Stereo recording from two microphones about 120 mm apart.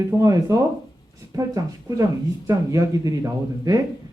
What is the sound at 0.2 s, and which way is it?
Speech, 30° right (ahead or behind).